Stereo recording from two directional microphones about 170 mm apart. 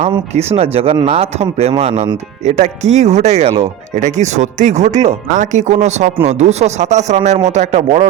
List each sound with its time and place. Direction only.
0.1 s speech: 35° right (ahead or behind)